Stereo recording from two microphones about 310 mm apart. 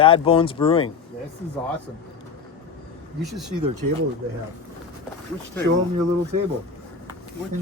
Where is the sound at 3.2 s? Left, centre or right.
Centre.